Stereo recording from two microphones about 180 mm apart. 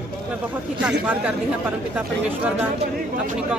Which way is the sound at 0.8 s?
5° right (ahead or behind).